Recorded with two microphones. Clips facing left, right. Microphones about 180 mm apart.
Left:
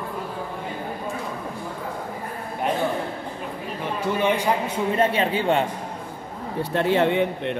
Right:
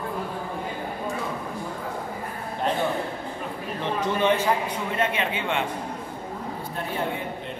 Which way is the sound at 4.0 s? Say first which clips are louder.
Left 1 dB; 10° left (ahead or behind).